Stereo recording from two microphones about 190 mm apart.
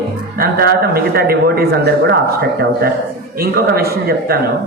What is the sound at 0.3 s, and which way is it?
A man's voice, 55° right (ahead or behind).